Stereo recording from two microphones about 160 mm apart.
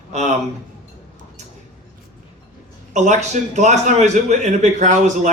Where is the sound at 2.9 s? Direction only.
45° right (ahead or behind).